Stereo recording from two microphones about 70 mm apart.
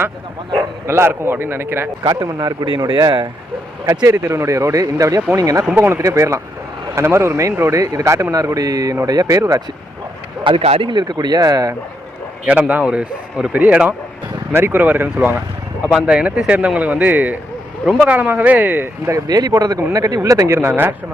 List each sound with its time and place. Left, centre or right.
0.9 s a man's voice: right
2.0 s speech: right
3.8 s speech: right
5.7 s a man's voice: right
6.0 s a man's voice: right
8.5 s speech: right
11.1 s speech: right
12.5 s speech: centre
14.5 s speech: right
15.9 s speech: centre; by 19.1 s right
19.1 s speech: right
20.6 s a man's voice: right